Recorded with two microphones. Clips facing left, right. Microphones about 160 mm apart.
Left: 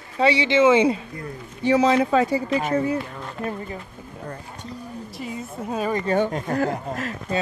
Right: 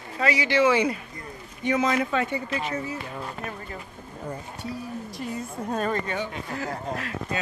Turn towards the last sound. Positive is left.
turn(degrees=45)  # may be behind; listen again after turning